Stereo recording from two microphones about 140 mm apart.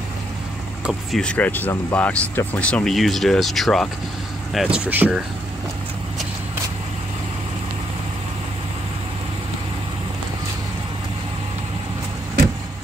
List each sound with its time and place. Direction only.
0.8 s speech: 5° left (ahead or behind); by 5.2 s 10° right (ahead or behind)